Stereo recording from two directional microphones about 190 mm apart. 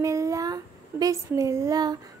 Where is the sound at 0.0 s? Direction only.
15° right (ahead or behind).